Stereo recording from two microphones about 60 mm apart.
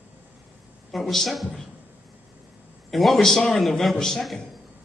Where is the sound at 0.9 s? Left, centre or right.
Centre.